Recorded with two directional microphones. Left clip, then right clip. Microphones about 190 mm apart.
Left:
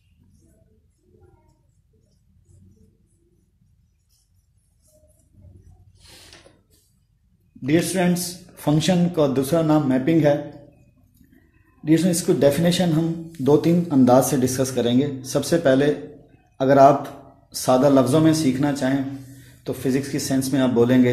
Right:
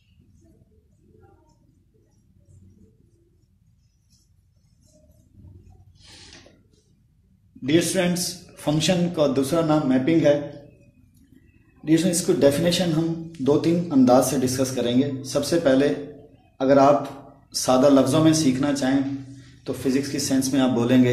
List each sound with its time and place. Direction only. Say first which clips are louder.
7.6 s a man's voice: even; 35° left (ahead or behind)
11.8 s a man's voice: left 1 dB; 40° left (ahead or behind)